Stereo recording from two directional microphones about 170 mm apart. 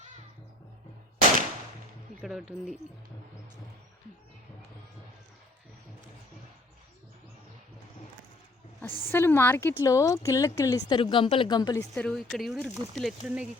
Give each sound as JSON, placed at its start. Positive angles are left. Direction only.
{"t": 2.2, "sound": "speech", "side_deg": -5}
{"t": 8.8, "sound": "a woman's voice", "side_deg": 15}
{"t": 11.9, "sound": "speech", "side_deg": 5}